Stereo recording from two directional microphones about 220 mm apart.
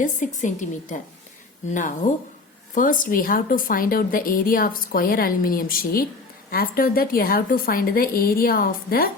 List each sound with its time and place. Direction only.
0.4 s a woman's voice: 35° left (ahead or behind)